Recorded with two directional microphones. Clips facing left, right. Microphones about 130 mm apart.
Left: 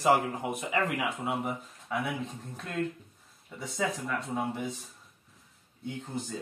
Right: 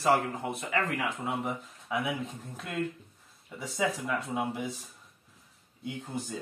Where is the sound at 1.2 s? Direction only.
Centre (ahead or behind).